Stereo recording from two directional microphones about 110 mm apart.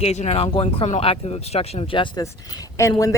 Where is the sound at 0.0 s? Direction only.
85° left; by 2.0 s 55° left (ahead or behind).